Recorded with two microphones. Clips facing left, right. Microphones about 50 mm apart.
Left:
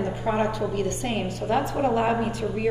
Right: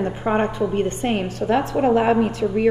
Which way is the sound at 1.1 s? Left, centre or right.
Right.